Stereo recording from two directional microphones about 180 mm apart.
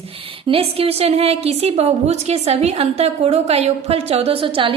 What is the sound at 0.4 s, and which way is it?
A woman's voice, 30° right (ahead or behind).